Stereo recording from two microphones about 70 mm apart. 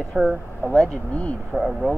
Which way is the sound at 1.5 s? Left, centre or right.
Centre.